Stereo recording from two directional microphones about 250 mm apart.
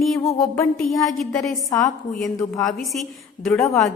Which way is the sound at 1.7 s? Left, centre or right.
Centre.